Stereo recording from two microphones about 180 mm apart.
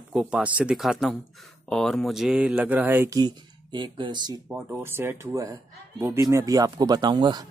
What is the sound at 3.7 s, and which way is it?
Speech, 25° right (ahead or behind).